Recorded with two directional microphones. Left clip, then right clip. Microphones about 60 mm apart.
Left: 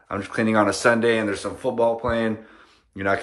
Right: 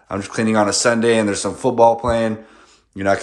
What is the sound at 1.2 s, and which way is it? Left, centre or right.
Speech, right.